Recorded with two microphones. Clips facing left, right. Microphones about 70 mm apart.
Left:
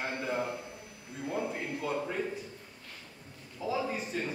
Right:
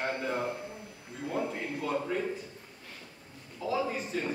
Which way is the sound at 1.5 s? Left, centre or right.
Centre.